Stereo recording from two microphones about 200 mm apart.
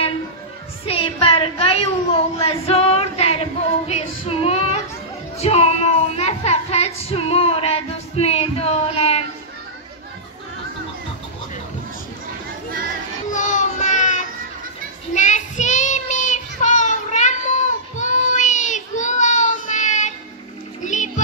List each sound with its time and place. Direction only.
0.8 s child singing: 30° left (ahead or behind)
2.4 s female singing: 30° left (ahead or behind)
5.4 s child singing: 30° left (ahead or behind)
13.3 s a sound: 40° left (ahead or behind)
15.1 s child singing: 35° left (ahead or behind)
20.8 s music: 40° left (ahead or behind)